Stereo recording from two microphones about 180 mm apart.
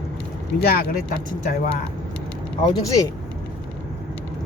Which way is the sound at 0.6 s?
60° left (ahead or behind).